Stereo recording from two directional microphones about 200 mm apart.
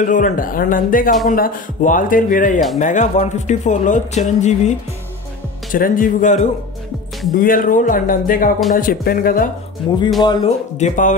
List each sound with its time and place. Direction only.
0.0 s speech: 40° left (ahead or behind)
10.2 s speech: 20° left (ahead or behind)
10.8 s speech: 40° left (ahead or behind)